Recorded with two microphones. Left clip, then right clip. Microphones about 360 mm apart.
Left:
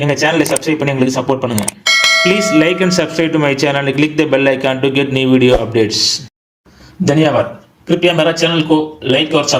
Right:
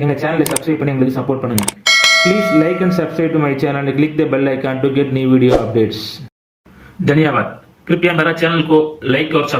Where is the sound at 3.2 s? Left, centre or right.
Left.